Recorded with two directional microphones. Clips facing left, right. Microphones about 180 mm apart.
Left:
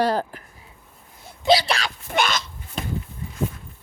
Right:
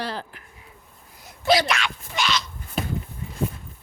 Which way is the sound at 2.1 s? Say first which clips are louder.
Left 4 dB; 50° left (ahead or behind).